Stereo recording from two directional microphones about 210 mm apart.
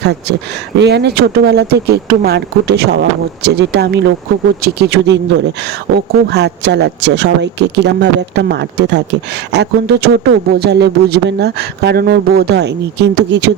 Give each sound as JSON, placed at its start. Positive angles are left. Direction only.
{"t": 0.0, "sound": "a man's voice", "side_deg": -50}
{"t": 6.2, "sound": "a man's voice", "side_deg": -55}